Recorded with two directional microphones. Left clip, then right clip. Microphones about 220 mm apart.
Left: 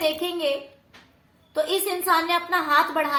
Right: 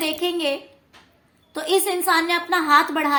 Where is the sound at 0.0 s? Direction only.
40° right (ahead or behind).